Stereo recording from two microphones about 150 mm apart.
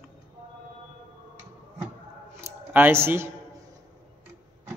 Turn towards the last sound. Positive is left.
turn(degrees=-15)  # may be behind; listen again after turning